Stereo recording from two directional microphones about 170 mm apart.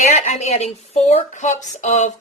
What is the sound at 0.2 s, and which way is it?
A woman's voice, 40° left (ahead or behind).